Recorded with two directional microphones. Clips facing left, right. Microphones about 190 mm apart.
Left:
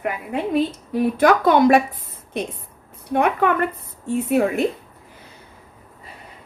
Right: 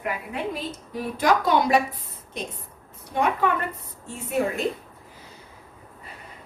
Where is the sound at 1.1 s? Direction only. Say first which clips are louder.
Left 4 dB; 60° left (ahead or behind).